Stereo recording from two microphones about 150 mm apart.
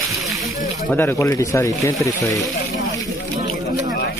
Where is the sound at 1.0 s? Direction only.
20° left (ahead or behind).